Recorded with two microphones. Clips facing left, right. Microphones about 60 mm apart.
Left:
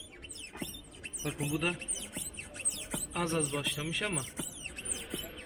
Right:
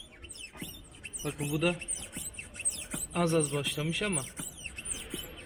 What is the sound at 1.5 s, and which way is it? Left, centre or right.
Speech, centre.